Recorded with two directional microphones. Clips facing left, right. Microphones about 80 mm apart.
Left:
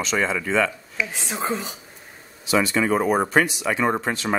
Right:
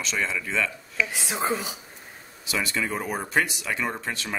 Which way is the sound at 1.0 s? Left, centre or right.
Centre.